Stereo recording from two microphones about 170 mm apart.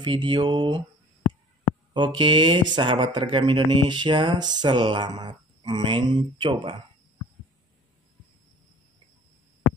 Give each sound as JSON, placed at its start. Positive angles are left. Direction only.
{"t": 0.0, "sound": "speech", "side_deg": -25}
{"t": 2.0, "sound": "speech", "side_deg": -30}